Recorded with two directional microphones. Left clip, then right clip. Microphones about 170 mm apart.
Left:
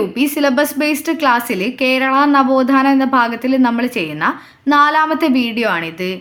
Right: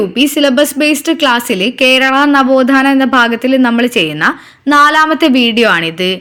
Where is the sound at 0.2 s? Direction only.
20° right (ahead or behind).